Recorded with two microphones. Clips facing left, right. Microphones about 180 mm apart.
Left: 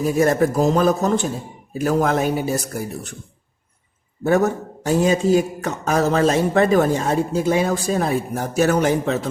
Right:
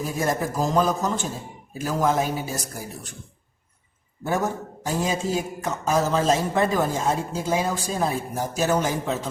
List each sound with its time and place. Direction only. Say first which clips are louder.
0.2 s a man's voice: left 7 dB; 65° left (ahead or behind)
4.3 s a man's voice: left 7 dB; 70° left (ahead or behind)